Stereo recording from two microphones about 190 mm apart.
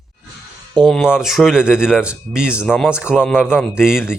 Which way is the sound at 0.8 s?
Centre (ahead or behind).